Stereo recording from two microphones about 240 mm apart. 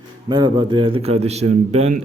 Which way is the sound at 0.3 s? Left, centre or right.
Centre.